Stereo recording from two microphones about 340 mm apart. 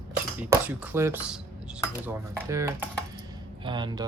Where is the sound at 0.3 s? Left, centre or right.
Centre.